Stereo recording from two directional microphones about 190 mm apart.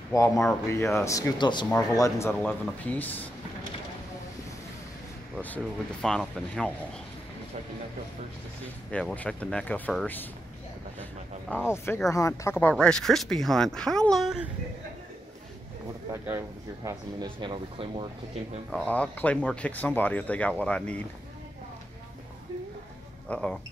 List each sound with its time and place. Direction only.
0.1 s speech: 15° left (ahead or behind)
5.3 s speech: 10° left (ahead or behind)
8.9 s speech: 5° left (ahead or behind)
11.4 s speech: 10° left (ahead or behind)
16.1 s speech: 15° right (ahead or behind)
18.7 s speech: 10° left (ahead or behind)
23.2 s speech: 5° left (ahead or behind)